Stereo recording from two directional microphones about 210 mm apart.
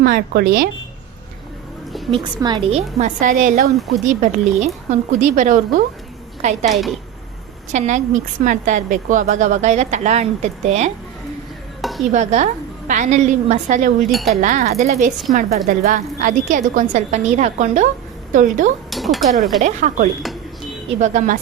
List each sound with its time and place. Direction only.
0.0 s speech: 45° right (ahead or behind)
1.9 s a sound: centre (ahead or behind)
2.1 s a woman's voice: 20° right (ahead or behind); by 3.7 s 35° right (ahead or behind)
3.8 s speech: centre (ahead or behind)
4.0 s a woman's voice: 35° right (ahead or behind)
6.7 s speech: centre (ahead or behind)
7.7 s a woman's voice: 35° right (ahead or behind)
11.8 s a sound: centre (ahead or behind)
12.1 s a woman's voice: 35° right (ahead or behind)
14.1 s speech: centre (ahead or behind)
14.4 s a woman's voice: 35° right (ahead or behind)
18.9 s a sound: centre (ahead or behind)
19.4 s speech: centre (ahead or behind)
19.6 s a woman's voice: 35° right (ahead or behind)